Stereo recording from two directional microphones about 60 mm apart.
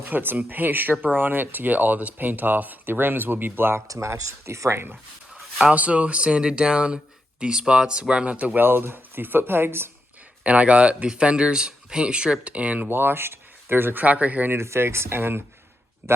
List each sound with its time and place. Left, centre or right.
0.0 s speech: right
3.8 s speech: right
5.7 s speech: right
8.5 s speech: right
10.4 s speech: right
12.9 s speech: right
14.0 s speech: right
14.5 s speech: right